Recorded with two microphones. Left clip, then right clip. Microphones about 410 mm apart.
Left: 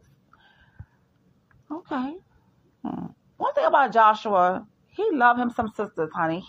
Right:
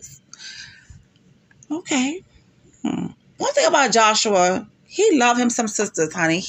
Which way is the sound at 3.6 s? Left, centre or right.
Left.